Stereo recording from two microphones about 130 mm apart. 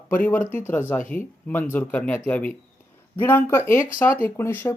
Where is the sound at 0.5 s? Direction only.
15° left (ahead or behind).